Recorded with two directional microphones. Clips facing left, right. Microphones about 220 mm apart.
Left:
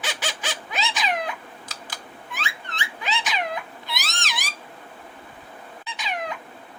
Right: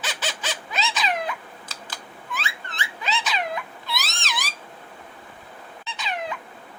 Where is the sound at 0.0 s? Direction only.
15° left (ahead or behind).